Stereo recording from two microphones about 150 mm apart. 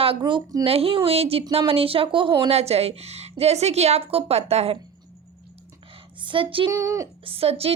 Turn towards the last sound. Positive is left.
turn(degrees=-40)  # may be behind; listen again after turning